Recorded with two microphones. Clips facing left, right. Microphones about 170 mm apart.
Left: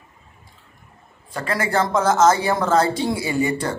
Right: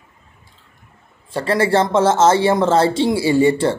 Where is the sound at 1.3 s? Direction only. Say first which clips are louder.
Right 6 dB; 30° right (ahead or behind).